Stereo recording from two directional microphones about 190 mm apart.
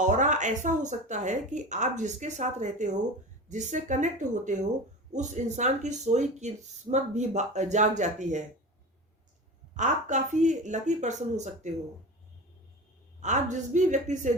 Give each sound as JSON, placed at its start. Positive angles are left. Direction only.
{"t": 0.0, "sound": "speech", "side_deg": -40}
{"t": 9.7, "sound": "speech", "side_deg": -40}
{"t": 13.2, "sound": "speech", "side_deg": -40}